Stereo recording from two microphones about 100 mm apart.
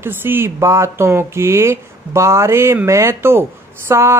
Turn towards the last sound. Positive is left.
turn(degrees=-25)  # may be behind; listen again after turning